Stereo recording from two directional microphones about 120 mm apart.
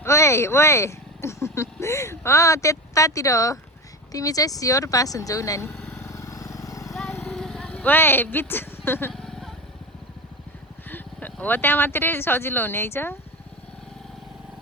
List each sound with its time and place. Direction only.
0.0 s speech: 25° left (ahead or behind)
5.7 s vehicle: 5° left (ahead or behind)
6.0 s vehicle: 25° left (ahead or behind)
6.9 s vehicle: 5° left (ahead or behind)
7.3 s speech: 5° left (ahead or behind)
9.1 s vehicle: 5° left (ahead or behind)
10.8 s speech: 15° left (ahead or behind)